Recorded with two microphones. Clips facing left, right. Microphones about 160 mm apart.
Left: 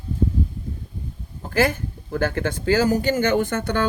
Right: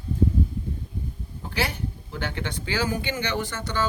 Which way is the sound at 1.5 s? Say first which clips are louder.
Left 8 dB; 50° left (ahead or behind).